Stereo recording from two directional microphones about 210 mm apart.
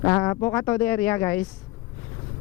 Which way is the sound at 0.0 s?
15° left (ahead or behind).